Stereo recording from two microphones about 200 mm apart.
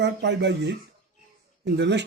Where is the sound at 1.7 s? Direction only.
60° right (ahead or behind).